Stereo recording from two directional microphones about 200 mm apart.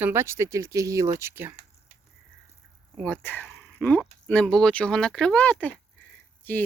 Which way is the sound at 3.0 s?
5° left (ahead or behind).